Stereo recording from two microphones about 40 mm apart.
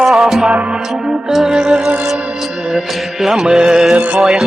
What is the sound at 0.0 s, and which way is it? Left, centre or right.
Music, centre.